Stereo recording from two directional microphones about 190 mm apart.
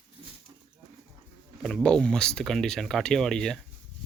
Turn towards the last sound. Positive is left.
turn(degrees=5)  # may be behind; listen again after turning